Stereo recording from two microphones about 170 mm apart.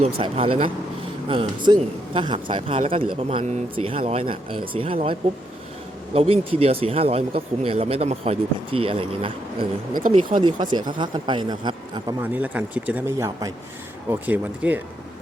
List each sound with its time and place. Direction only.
0.2 s speech: 30° right (ahead or behind)
6.1 s speech: 35° right (ahead or behind)
12.2 s speech: 10° right (ahead or behind)